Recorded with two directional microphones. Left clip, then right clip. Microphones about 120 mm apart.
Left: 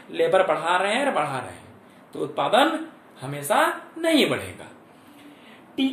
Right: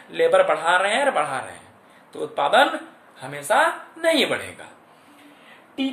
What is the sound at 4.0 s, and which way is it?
Speech, 15° right (ahead or behind).